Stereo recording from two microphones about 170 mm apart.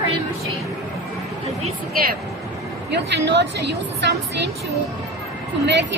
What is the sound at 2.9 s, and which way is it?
A woman's voice, 90° right.